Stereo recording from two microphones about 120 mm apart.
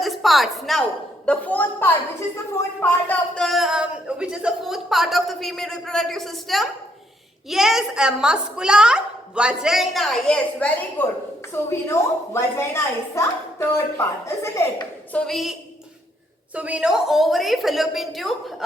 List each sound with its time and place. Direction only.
0.0 s a woman's voice: centre (ahead or behind)
3.4 s a woman's voice: centre (ahead or behind); by 14.7 s 25° left (ahead or behind)
15.1 s a woman's voice: 5° left (ahead or behind)
16.6 s a woman's voice: 10° right (ahead or behind)